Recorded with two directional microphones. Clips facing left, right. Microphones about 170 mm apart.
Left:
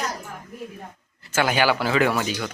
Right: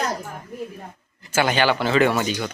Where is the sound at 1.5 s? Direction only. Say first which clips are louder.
Right 1 dB; 5° left (ahead or behind).